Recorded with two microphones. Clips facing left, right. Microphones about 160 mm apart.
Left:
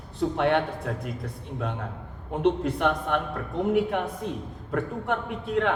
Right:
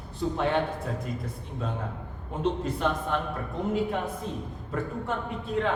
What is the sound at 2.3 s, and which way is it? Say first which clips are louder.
A woman's voice: left 4 dB; 65° left (ahead or behind).